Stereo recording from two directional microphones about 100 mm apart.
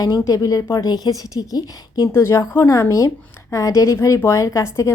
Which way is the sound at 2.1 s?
30° left (ahead or behind).